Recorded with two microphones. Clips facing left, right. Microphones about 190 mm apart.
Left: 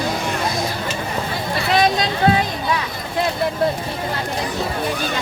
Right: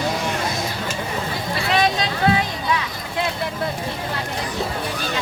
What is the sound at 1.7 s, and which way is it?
Speech, 40° left (ahead or behind).